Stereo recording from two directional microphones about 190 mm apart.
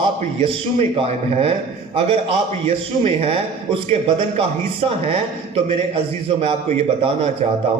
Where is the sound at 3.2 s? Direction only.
30° right (ahead or behind).